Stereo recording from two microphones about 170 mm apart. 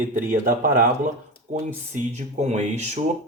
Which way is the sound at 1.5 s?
45° right (ahead or behind).